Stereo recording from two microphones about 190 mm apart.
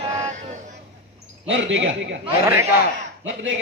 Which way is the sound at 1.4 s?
75° right (ahead or behind).